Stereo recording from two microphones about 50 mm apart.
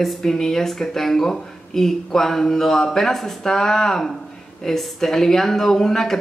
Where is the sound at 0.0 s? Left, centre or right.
Centre.